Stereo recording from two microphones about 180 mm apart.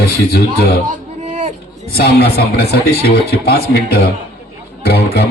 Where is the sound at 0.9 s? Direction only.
45° right (ahead or behind).